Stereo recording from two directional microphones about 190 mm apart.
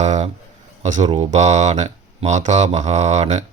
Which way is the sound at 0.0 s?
35° right (ahead or behind).